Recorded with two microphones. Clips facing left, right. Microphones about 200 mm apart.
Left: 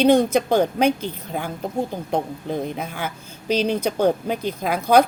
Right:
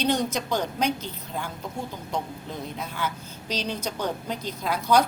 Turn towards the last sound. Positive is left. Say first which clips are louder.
# left 5 dB
turn(degrees=55)  # may be behind; listen again after turning